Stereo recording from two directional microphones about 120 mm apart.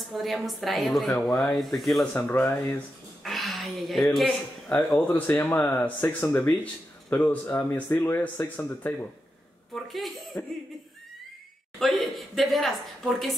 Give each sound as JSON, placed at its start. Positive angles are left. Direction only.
{"t": 0.1, "sound": "speech", "side_deg": 0}
{"t": 2.1, "sound": "speech", "side_deg": 10}
{"t": 3.3, "sound": "a sound", "side_deg": 0}
{"t": 4.1, "sound": "a man's voice", "side_deg": 0}
{"t": 5.0, "sound": "speech", "side_deg": 15}
{"t": 9.8, "sound": "speech", "side_deg": 0}
{"t": 11.8, "sound": "speech", "side_deg": 0}